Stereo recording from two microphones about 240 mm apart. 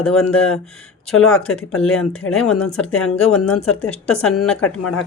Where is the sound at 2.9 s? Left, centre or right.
Left.